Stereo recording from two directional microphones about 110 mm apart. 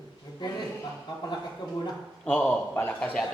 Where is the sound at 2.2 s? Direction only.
10° left (ahead or behind).